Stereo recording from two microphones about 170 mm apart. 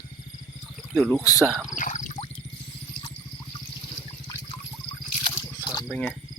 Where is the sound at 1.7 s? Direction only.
50° left (ahead or behind).